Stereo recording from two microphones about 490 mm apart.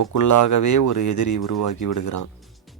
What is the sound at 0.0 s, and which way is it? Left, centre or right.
Speech, left.